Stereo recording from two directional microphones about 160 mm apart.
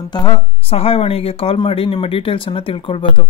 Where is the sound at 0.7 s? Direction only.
35° left (ahead or behind).